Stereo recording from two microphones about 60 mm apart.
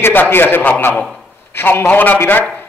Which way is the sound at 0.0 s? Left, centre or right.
Left.